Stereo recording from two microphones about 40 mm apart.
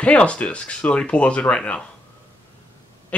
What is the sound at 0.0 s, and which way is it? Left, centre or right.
Speech, left.